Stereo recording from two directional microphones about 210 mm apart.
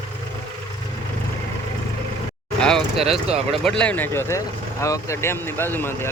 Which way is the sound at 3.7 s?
5° left (ahead or behind).